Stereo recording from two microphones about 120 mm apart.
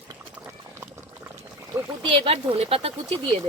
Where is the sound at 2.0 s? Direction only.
45° right (ahead or behind).